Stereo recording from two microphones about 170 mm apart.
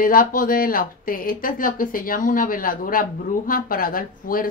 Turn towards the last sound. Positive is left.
turn(degrees=55)  # may be behind; listen again after turning